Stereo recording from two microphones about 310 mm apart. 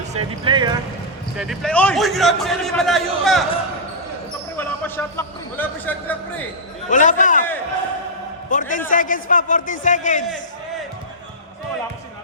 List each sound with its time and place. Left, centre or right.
0.1 s speech: centre
1.4 s a man's voice: centre
4.5 s speech: centre
6.9 s a man's voice: left
8.4 s a man's voice: left